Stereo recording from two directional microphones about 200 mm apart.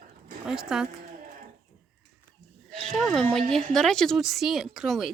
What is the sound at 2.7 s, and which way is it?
A woman's voice, centre (ahead or behind).